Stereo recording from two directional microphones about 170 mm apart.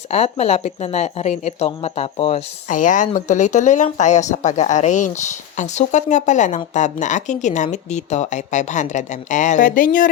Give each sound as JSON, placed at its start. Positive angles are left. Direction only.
{"t": 0.1, "sound": "speech", "side_deg": 40}
{"t": 2.6, "sound": "speech", "side_deg": 50}